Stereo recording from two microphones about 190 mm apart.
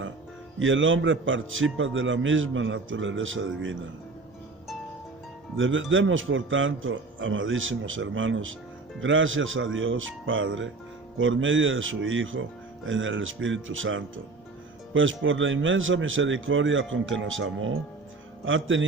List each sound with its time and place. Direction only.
0.6 s a man's voice: 90° right
5.5 s a man's voice: 90° right